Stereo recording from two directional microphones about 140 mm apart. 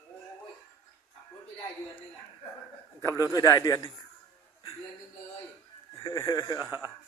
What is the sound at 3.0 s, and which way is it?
Speech, 20° left (ahead or behind).